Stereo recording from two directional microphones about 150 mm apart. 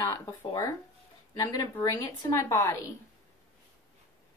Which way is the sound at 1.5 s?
25° left (ahead or behind).